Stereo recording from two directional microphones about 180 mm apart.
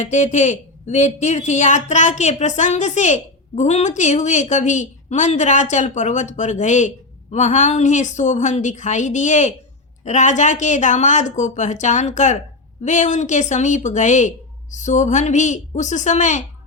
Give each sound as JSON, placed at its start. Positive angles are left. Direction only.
{"t": 0.0, "sound": "a woman's voice", "side_deg": 40}